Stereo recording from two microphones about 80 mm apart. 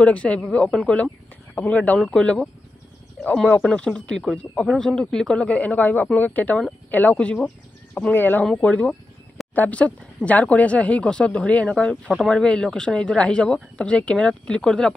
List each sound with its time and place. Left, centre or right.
0.0 s speech: centre
2.0 s speech: centre
3.6 s speech: centre